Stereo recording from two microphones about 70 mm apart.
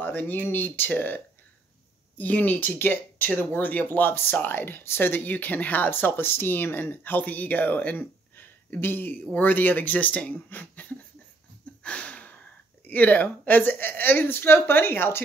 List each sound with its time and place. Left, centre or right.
0.0 s speech: left
11.8 s a sound: centre
12.8 s speech: left